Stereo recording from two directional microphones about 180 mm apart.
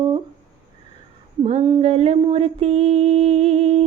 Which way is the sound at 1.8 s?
35° right (ahead or behind).